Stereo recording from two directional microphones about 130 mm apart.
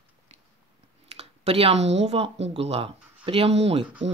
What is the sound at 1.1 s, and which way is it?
Speech, 55° right (ahead or behind).